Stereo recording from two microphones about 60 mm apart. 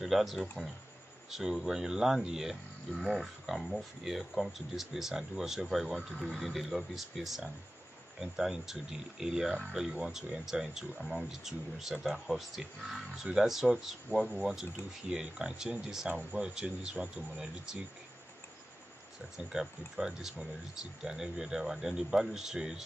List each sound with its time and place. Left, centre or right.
0.0 s speech: centre
5.9 s speech: centre
6.4 s speech: centre
16.1 s a man's voice: right
16.3 s a man's voice: centre
19.3 s speech: centre